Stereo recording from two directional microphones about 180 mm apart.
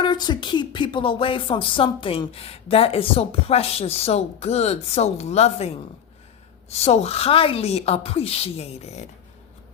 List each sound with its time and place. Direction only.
0.0 s a woman's voice: 25° left (ahead or behind)